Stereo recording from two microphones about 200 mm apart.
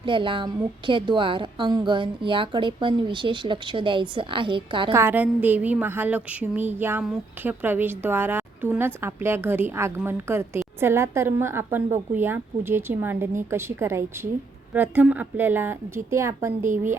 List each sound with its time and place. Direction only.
0.0 s a woman's voice: 25° right (ahead or behind)
4.9 s speech: 10° right (ahead or behind)